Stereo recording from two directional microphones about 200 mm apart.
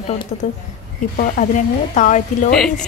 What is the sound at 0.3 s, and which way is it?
Speech, 35° left (ahead or behind).